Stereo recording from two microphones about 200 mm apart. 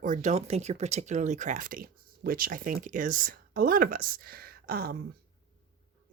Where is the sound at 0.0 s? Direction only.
40° right (ahead or behind).